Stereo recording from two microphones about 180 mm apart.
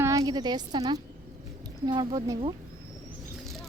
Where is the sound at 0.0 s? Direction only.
20° right (ahead or behind).